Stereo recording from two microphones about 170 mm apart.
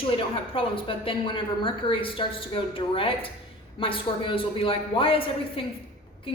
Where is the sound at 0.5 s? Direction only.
30° left (ahead or behind).